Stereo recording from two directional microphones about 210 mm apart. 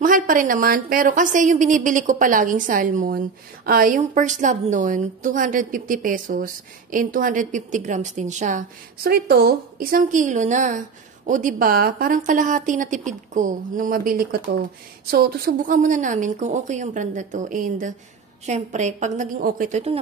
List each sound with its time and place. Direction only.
0.0 s a woman's voice: 40° right (ahead or behind)